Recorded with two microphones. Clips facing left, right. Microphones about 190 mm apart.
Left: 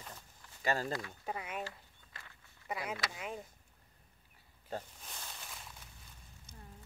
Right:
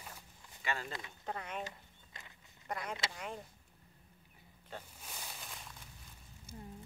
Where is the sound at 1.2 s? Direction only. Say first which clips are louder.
Right 3 dB; 10° left (ahead or behind).